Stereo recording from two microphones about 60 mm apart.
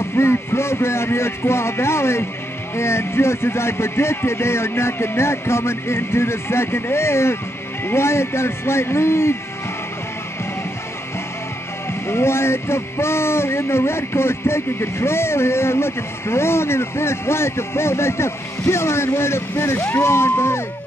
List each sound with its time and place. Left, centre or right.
0.1 s speech: left
12.1 s speech: left